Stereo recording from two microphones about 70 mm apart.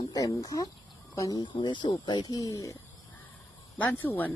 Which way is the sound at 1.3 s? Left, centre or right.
Left.